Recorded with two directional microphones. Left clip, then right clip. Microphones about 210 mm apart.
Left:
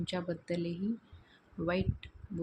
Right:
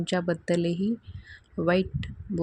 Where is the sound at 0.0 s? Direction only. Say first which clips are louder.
Right 10 dB; 30° right (ahead or behind).